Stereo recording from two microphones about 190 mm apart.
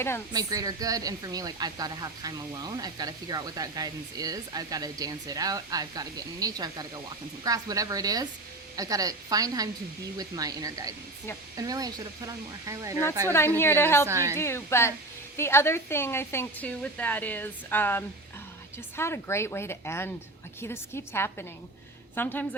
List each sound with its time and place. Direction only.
0.3 s speech: 20° right (ahead or behind)
13.2 s a woman's voice: 10° left (ahead or behind)
14.1 s a woman's voice: 15° right (ahead or behind)
14.3 s a woman's voice: 15° left (ahead or behind)